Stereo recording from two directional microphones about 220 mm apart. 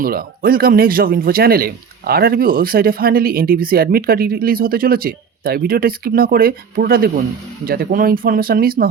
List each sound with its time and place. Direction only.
0.0 s speech: 40° right (ahead or behind)